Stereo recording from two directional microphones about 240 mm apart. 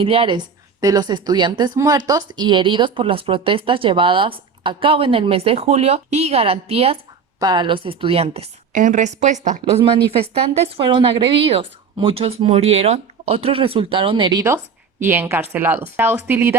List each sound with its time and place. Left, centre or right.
0.0 s a woman's voice: right